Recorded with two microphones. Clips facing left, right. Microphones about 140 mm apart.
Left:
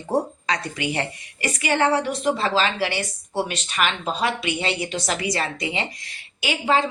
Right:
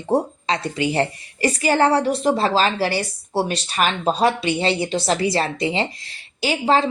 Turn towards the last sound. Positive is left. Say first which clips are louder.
# right 3 dB
turn(degrees=-35)  # may be behind; listen again after turning